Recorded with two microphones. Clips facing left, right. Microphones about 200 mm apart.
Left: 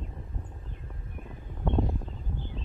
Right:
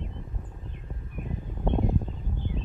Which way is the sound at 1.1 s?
15° right (ahead or behind).